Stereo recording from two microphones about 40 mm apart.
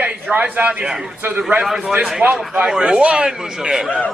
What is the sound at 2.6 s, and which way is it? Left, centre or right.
A man's voice, centre.